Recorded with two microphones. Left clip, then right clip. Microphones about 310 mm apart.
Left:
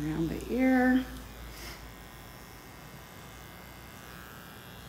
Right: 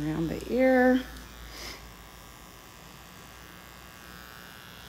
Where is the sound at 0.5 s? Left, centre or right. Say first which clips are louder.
Right 5 dB; right.